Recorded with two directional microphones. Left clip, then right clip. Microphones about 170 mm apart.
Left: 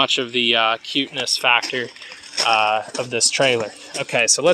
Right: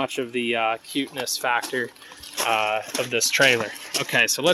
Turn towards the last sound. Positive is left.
turn(degrees=5)  # may be behind; listen again after turning